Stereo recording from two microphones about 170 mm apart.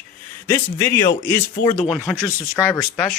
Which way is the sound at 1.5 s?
30° left (ahead or behind).